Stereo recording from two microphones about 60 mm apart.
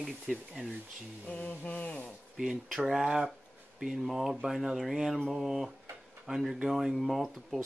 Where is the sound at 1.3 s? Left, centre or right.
Left.